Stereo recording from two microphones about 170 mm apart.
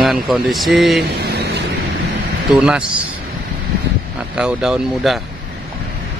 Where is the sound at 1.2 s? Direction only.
75° right (ahead or behind).